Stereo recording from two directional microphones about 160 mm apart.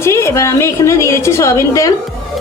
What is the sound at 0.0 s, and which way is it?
A woman's voice, 15° left (ahead or behind).